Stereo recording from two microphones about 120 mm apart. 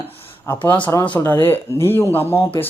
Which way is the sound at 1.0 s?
15° left (ahead or behind).